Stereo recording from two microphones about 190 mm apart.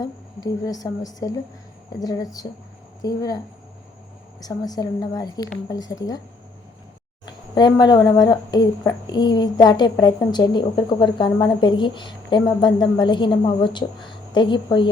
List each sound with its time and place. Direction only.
0.0 s speech: 20° left (ahead or behind)
7.3 s speech: 20° left (ahead or behind)